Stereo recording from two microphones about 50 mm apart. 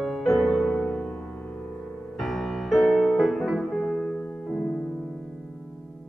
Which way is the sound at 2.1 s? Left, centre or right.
Centre.